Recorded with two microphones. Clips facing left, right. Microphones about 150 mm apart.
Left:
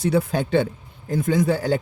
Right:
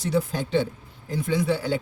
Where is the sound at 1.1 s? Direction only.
45° left (ahead or behind).